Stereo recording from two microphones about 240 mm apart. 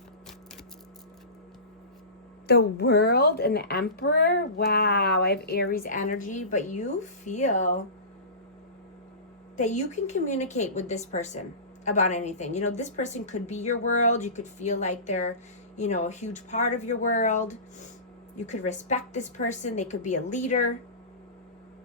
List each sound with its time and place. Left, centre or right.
2.5 s speech: left
9.6 s speech: left